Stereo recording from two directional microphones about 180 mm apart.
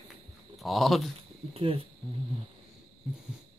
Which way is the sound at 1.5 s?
30° right (ahead or behind).